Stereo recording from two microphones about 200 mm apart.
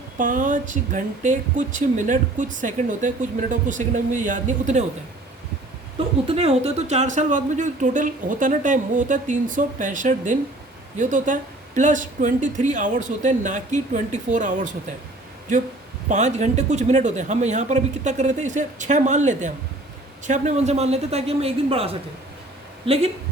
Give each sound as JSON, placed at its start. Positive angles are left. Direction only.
{"t": 0.2, "sound": "speech", "side_deg": -40}
{"t": 6.2, "sound": "speech", "side_deg": -30}
{"t": 16.0, "sound": "speech", "side_deg": -35}